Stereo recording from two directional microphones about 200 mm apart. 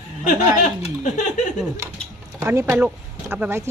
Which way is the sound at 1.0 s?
35° left (ahead or behind).